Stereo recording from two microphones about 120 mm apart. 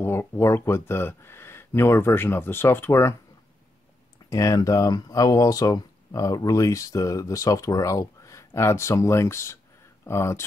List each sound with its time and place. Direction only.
0.0 s speech: 20° left (ahead or behind)
4.3 s speech: 30° left (ahead or behind)